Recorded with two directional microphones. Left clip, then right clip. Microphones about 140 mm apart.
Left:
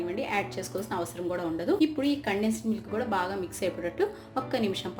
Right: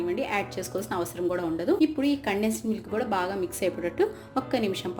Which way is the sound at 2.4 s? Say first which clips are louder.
Right 2 dB; 35° right (ahead or behind).